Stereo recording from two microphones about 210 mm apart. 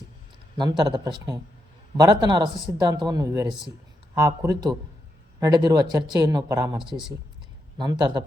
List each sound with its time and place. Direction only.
0.5 s speech: 20° right (ahead or behind)
6.8 s speech: centre (ahead or behind)
7.8 s speech: 20° right (ahead or behind)